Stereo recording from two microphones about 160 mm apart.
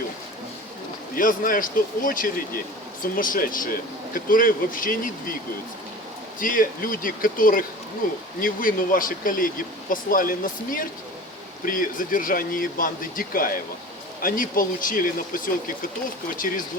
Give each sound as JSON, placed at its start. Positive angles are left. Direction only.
{"t": 1.1, "sound": "speech", "side_deg": 60}
{"t": 6.4, "sound": "speech", "side_deg": 60}